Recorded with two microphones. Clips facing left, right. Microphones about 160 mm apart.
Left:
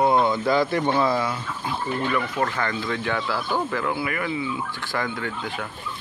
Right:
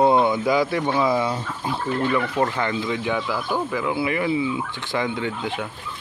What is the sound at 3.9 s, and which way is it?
Speech, 25° right (ahead or behind).